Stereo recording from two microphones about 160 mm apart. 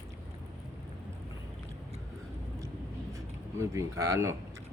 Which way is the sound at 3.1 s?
20° right (ahead or behind).